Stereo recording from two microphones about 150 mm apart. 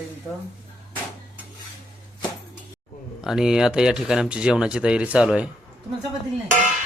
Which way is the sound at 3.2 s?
5° right (ahead or behind).